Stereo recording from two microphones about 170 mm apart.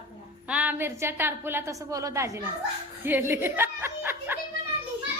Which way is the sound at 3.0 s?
10° right (ahead or behind).